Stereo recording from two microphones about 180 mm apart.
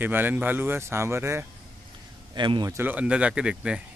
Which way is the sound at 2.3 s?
25° right (ahead or behind).